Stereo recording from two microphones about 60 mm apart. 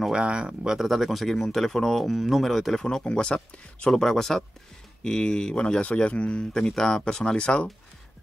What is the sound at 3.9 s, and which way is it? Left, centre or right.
Speech, centre.